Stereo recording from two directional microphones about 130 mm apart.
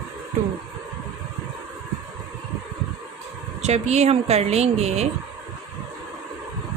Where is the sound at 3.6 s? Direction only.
60° right (ahead or behind).